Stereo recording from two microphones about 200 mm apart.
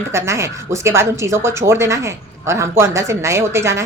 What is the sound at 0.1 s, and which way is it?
Speech, 15° right (ahead or behind).